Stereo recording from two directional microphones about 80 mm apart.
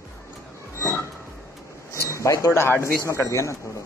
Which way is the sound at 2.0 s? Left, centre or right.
Left.